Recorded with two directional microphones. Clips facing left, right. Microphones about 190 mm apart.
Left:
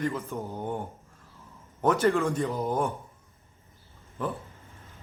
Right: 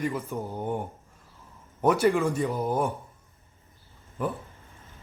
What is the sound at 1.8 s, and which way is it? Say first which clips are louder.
Speech: right 1 dB; 10° right (ahead or behind).